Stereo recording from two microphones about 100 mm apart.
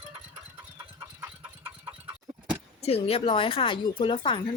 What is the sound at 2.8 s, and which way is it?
Speech, 85° left.